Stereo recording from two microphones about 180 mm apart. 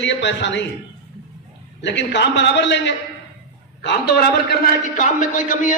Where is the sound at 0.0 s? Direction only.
85° left.